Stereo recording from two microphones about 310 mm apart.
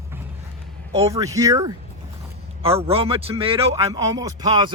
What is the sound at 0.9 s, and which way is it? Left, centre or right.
Speech, centre.